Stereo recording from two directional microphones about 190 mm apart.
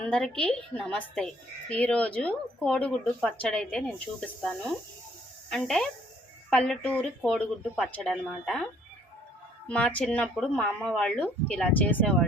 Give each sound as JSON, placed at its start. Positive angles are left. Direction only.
{"t": 0.0, "sound": "speech", "side_deg": 5}
{"t": 9.6, "sound": "speech", "side_deg": 5}